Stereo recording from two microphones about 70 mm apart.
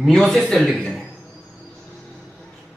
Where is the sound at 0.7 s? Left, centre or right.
Centre.